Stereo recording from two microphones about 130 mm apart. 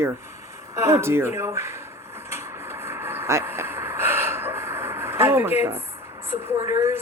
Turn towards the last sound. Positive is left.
turn(degrees=-25)  # may be behind; listen again after turning